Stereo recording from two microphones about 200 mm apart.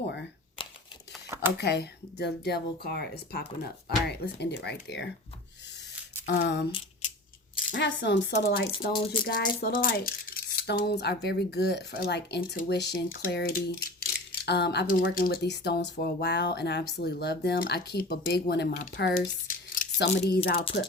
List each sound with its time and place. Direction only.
0.0 s a sound: 60° left (ahead or behind)
1.5 s speech: 55° left (ahead or behind)
6.2 s speech: 60° left (ahead or behind)
7.7 s speech: 60° left (ahead or behind)
19.8 s a sound: 45° left (ahead or behind)
20.1 s speech: 55° left (ahead or behind)